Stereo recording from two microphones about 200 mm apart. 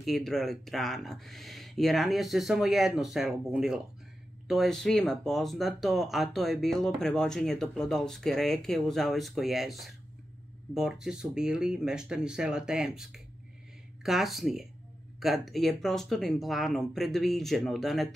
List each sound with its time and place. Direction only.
0.0 s speech: centre (ahead or behind)